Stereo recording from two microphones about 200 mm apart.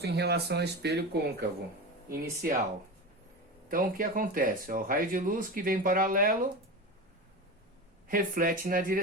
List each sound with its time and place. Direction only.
0.0 s speech: 55° right (ahead or behind)
3.7 s speech: 45° right (ahead or behind)
8.0 s speech: 45° right (ahead or behind)